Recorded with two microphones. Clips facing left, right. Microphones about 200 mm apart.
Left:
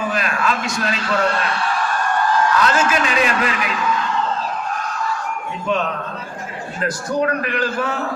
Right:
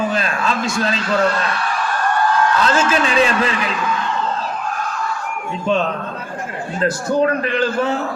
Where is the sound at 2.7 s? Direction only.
30° right (ahead or behind).